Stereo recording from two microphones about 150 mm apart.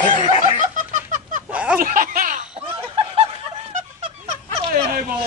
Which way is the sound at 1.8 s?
65° right (ahead or behind).